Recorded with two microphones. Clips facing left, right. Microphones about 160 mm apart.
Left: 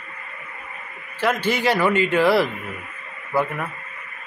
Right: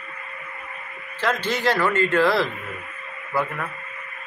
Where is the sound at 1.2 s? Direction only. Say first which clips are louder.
Left 2 dB; 10° left (ahead or behind).